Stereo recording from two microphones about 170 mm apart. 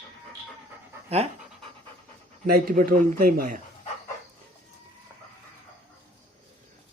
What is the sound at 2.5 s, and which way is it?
A man's voice, 60° right (ahead or behind).